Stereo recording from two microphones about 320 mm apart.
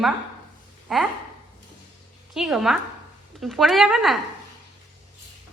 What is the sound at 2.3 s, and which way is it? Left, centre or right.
A woman's voice, centre.